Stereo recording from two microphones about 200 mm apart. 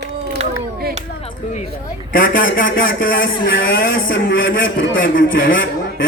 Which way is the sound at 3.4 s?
75° left (ahead or behind).